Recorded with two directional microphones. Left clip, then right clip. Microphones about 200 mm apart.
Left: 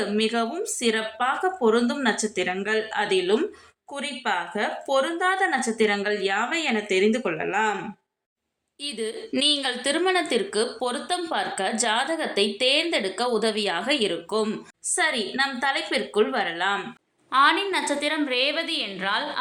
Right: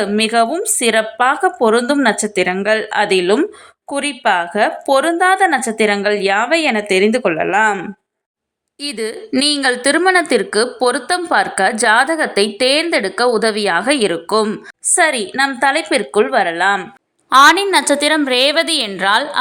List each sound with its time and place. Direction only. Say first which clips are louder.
0.0 s a woman's voice: right 10 dB; 40° right (ahead or behind)
8.8 s a woman's voice: right 8 dB; 40° right (ahead or behind)
14.4 s a woman's voice: right 9 dB; 35° right (ahead or behind); by 19.2 s 50° right (ahead or behind)